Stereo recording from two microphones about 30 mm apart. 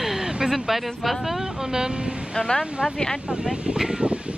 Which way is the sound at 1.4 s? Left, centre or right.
Right.